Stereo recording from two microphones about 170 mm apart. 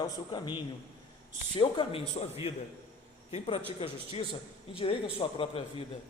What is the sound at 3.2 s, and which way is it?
A man's voice, 35° left (ahead or behind).